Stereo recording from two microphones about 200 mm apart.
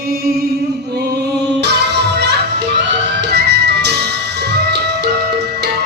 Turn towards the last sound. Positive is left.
turn(degrees=-55)  # may be behind; listen again after turning